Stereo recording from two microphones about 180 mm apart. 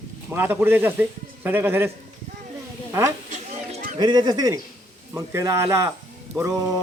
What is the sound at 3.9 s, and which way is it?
Speech, 25° right (ahead or behind).